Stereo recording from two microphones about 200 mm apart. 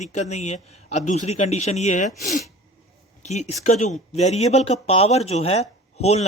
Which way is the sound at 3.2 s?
35° left (ahead or behind).